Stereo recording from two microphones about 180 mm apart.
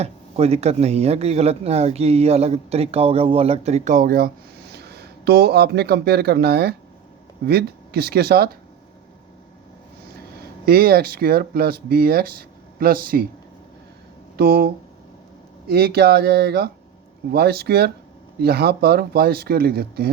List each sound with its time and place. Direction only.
0.0 s speech: 35° right (ahead or behind); by 8.4 s 60° right (ahead or behind)
10.7 s speech: 55° right (ahead or behind)
14.3 s speech: 60° right (ahead or behind)